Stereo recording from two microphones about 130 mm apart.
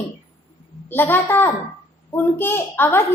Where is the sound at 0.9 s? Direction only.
15° left (ahead or behind).